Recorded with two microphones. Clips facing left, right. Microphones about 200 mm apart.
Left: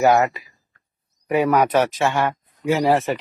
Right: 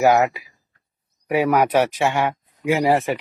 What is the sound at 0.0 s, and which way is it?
Speech, 5° right (ahead or behind).